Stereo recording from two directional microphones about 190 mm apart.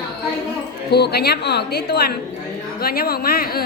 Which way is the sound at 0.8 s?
60° left (ahead or behind).